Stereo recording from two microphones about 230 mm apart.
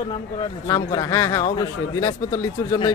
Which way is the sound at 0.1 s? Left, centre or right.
Centre.